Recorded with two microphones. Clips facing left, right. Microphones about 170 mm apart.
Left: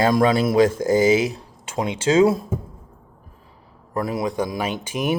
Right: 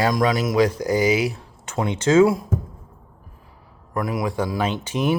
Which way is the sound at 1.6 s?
10° left (ahead or behind).